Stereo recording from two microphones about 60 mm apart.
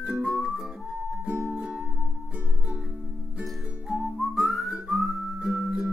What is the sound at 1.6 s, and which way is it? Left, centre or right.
Music, centre.